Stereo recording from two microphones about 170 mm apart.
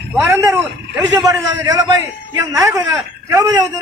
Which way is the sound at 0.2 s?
15° right (ahead or behind).